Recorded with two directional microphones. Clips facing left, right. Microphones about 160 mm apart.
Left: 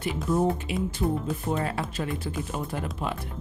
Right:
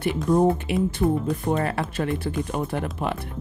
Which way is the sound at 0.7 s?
65° right (ahead or behind).